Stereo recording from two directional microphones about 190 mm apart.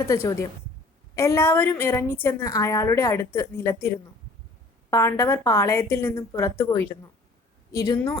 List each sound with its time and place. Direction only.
0.0 s a woman's voice: 15° left (ahead or behind)